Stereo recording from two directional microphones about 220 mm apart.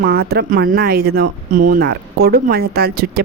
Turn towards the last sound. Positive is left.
turn(degrees=-45)  # may be behind; listen again after turning